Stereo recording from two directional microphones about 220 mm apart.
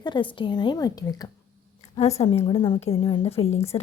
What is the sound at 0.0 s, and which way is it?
A woman's voice, 20° left (ahead or behind).